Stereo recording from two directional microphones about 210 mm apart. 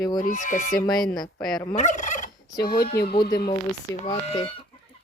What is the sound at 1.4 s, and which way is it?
Fowl, 5° left (ahead or behind).